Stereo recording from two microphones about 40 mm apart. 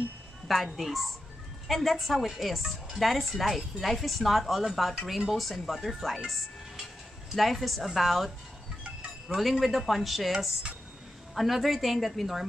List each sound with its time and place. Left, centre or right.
0.7 s a woman's voice: centre
7.3 s a woman's voice: centre
9.4 s a woman's voice: centre
11.3 s a woman's voice: centre